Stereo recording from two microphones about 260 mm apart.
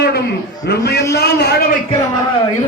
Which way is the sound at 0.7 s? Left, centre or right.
Left.